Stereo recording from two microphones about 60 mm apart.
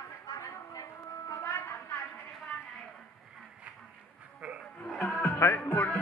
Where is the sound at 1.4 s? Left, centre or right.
Left.